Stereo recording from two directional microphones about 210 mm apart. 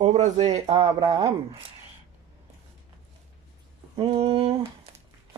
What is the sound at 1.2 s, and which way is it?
Speech, 25° right (ahead or behind).